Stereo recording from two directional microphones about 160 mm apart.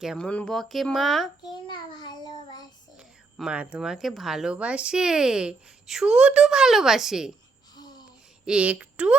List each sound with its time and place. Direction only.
0.0 s speech: 5° right (ahead or behind)
1.5 s child singing: 25° left (ahead or behind)
3.0 s speech: 5° right (ahead or behind)
7.8 s a sound: 25° left (ahead or behind)
8.4 s speech: 10° right (ahead or behind)